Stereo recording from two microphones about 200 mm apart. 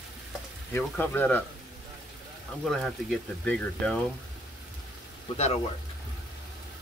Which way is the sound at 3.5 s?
5° left (ahead or behind).